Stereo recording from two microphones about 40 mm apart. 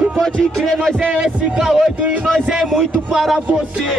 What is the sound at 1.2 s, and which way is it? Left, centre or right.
Speech, centre.